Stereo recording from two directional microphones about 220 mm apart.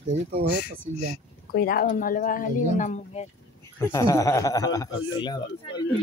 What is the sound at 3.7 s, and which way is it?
A man's voice, 15° left (ahead or behind).